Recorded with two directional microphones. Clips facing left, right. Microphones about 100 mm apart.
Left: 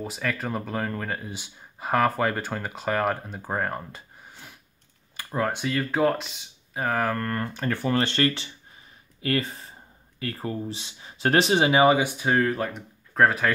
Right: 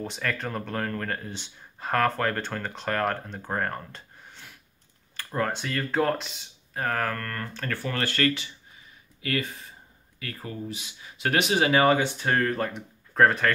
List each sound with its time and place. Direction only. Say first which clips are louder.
0.0 s speech: left 1 dB; 5° left (ahead or behind); by 11.6 s 30° left (ahead or behind)
11.6 s speech: right 1 dB; 15° left (ahead or behind)